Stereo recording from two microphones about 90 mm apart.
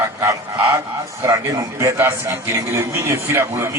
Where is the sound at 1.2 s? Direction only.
35° right (ahead or behind).